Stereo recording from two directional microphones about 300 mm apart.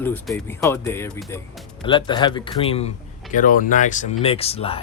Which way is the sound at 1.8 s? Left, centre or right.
Centre.